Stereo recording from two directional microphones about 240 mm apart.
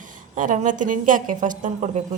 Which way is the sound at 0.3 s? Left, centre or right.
Right.